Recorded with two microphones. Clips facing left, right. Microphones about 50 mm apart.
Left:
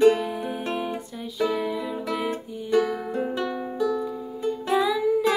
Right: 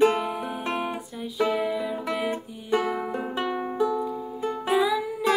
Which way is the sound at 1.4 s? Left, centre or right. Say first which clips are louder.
Right 1 dB; centre.